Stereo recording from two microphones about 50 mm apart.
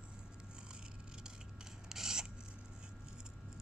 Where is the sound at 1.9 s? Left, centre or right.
Centre.